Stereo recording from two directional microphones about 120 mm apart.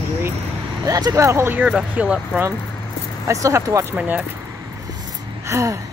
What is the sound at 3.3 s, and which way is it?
Speech, 25° right (ahead or behind).